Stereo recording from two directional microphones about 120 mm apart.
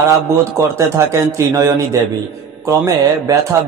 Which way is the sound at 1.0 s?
25° right (ahead or behind).